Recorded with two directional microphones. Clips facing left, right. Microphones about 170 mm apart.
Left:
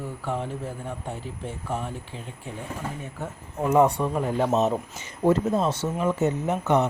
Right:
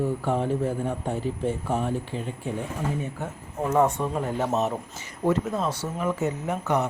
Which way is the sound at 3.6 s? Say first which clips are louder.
Left 2 dB; 15° left (ahead or behind).